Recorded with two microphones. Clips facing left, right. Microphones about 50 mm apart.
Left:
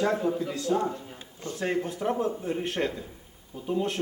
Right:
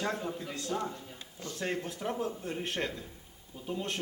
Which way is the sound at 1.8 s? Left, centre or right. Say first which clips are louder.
Left 7 dB; centre.